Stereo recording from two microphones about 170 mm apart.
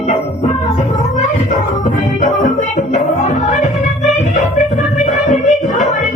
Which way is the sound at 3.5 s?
45° left (ahead or behind).